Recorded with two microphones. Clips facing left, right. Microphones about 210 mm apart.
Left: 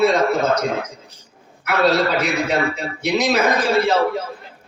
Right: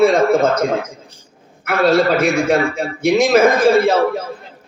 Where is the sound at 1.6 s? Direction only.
50° right (ahead or behind).